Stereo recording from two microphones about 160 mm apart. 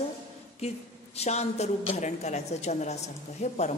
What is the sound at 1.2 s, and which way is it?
A woman's voice, 40° left (ahead or behind).